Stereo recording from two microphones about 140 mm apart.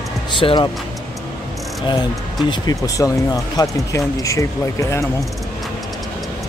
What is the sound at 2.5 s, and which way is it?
Speech, 25° left (ahead or behind).